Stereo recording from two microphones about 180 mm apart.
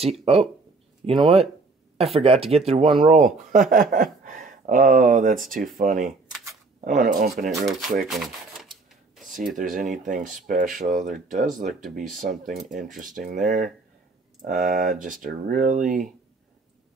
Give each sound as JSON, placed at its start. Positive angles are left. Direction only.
{"t": 0.2, "sound": "speech", "side_deg": -35}
{"t": 8.1, "sound": "speech", "side_deg": 0}
{"t": 9.6, "sound": "speech", "side_deg": -45}